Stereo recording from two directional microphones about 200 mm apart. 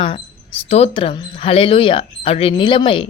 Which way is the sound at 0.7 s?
30° left (ahead or behind).